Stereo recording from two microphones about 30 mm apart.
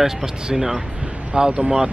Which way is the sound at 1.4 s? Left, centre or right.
Right.